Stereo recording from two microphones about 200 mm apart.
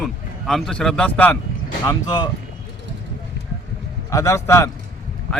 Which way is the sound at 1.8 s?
20° left (ahead or behind).